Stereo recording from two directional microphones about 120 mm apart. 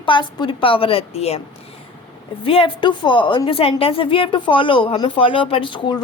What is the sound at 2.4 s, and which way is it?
Speech, 45° left (ahead or behind).